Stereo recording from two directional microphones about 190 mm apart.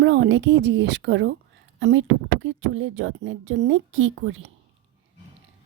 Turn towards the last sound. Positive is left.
turn(degrees=-90)